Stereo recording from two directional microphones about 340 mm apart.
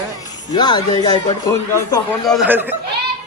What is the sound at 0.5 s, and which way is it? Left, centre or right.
Speech, centre.